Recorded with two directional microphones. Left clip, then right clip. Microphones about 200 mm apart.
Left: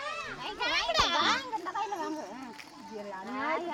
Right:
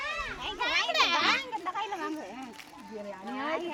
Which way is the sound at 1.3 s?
20° right (ahead or behind).